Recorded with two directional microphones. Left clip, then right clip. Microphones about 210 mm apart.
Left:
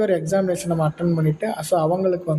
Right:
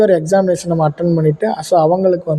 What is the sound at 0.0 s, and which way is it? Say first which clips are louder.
Speech: right 8 dB; 25° right (ahead or behind).